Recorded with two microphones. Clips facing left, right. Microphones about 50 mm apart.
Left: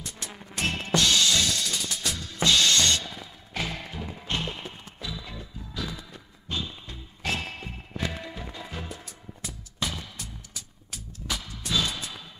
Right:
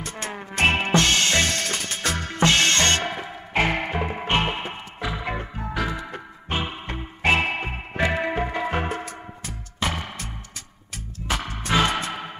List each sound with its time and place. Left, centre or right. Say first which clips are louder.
0.0 s music: right 9 dB; right